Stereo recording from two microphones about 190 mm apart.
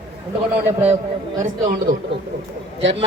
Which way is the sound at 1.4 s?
40° right (ahead or behind).